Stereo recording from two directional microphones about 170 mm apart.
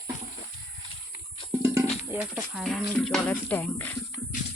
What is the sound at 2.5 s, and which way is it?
Speech, centre (ahead or behind).